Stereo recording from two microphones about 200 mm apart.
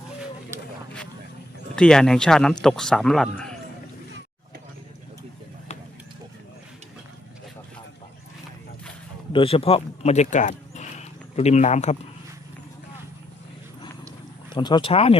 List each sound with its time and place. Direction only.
1.7 s speech: 5° left (ahead or behind)
9.3 s speech: 25° left (ahead or behind)
14.5 s speech: 20° left (ahead or behind)